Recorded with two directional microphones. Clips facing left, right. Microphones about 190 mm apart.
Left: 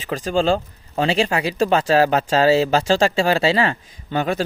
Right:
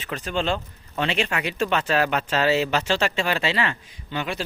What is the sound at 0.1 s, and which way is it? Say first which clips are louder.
Speech: left 7 dB; 35° left (ahead or behind).